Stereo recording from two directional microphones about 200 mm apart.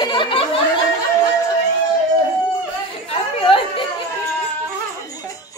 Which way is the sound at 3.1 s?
25° left (ahead or behind).